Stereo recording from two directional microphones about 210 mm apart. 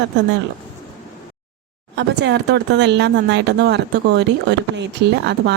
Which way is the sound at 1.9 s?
55° right (ahead or behind).